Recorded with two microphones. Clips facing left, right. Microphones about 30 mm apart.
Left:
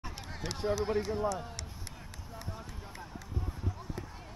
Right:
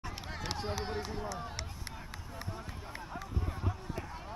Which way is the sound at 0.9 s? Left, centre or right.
Centre.